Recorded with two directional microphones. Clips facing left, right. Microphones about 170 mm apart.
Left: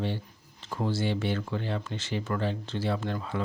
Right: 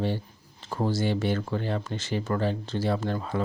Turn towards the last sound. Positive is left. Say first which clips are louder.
# right 3 dB
turn(degrees=-40)  # may be behind; listen again after turning